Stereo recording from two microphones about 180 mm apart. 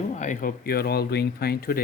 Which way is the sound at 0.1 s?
45° left (ahead or behind).